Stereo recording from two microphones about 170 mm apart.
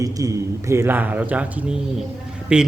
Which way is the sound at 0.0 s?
20° right (ahead or behind).